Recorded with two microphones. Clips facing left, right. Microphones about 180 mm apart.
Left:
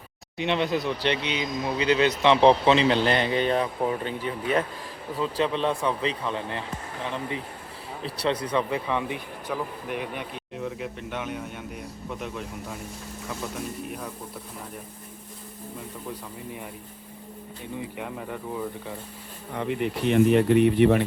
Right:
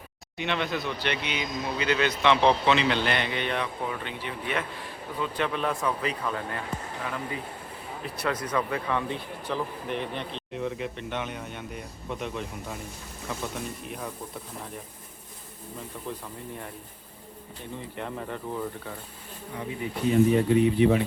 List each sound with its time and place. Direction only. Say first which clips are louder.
0.3 s speech: left 4 dB; 30° left (ahead or behind)
8.7 s a man's voice: left 1 dB; 15° left (ahead or behind)
17.7 s speech: left 1 dB; 10° left (ahead or behind)
19.5 s speech: left 6 dB; 75° left (ahead or behind)